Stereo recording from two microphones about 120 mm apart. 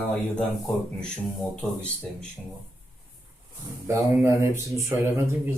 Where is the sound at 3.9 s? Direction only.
20° right (ahead or behind).